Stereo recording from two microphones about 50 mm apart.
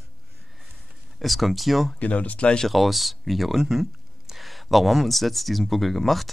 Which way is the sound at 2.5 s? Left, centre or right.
Centre.